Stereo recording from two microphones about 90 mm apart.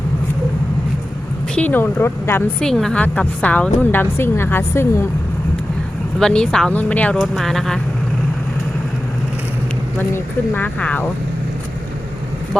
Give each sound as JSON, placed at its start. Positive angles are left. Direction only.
{"t": 1.5, "sound": "a woman's voice", "side_deg": 20}
{"t": 2.6, "sound": "speech", "side_deg": 5}
{"t": 3.0, "sound": "a woman's voice", "side_deg": 15}
{"t": 6.1, "sound": "speech", "side_deg": 10}
{"t": 7.2, "sound": "speech", "side_deg": 5}
{"t": 10.5, "sound": "a woman's voice", "side_deg": 15}